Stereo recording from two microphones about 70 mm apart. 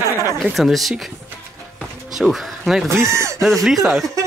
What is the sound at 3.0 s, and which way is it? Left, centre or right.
Speech, right.